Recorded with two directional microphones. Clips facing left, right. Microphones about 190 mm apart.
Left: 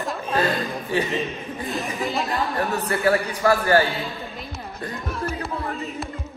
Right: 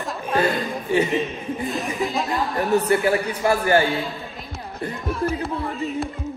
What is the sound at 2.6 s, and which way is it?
A man's voice, 20° right (ahead or behind).